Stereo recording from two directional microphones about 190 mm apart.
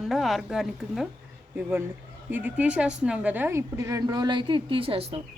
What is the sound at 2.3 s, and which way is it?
A woman's voice, 10° right (ahead or behind).